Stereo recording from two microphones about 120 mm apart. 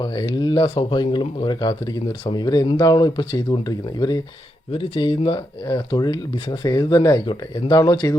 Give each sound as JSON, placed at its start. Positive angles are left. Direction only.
{"t": 0.0, "sound": "speech", "side_deg": 40}
{"t": 4.7, "sound": "speech", "side_deg": 45}